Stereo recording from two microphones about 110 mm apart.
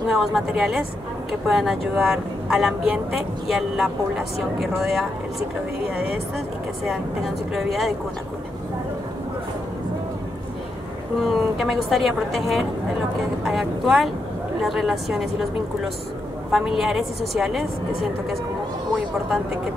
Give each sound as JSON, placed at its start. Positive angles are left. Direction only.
{"t": 0.1, "sound": "speech", "side_deg": 0}
{"t": 6.3, "sound": "speech", "side_deg": 0}
{"t": 11.1, "sound": "speech", "side_deg": 0}
{"t": 16.5, "sound": "speech", "side_deg": 0}